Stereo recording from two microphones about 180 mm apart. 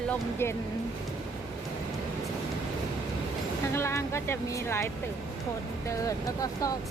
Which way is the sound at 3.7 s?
15° left (ahead or behind).